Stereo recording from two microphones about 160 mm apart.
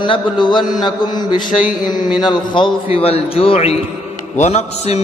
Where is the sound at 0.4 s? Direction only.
30° left (ahead or behind).